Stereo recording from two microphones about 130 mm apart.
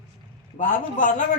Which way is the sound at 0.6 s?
80° left.